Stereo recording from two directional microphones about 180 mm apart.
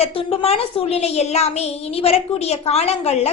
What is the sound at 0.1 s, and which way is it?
A woman's voice, 30° left (ahead or behind).